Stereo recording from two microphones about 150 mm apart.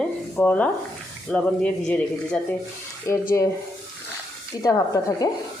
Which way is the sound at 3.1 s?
20° left (ahead or behind).